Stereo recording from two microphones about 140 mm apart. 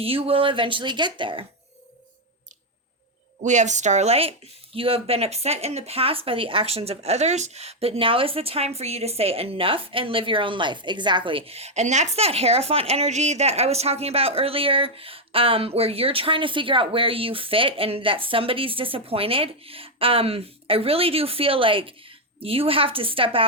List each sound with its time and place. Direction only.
0.0 s speech: 45° right (ahead or behind)
3.4 s speech: 60° right (ahead or behind); by 23.5 s 40° right (ahead or behind)